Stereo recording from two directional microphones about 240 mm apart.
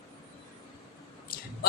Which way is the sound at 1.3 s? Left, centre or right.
Left.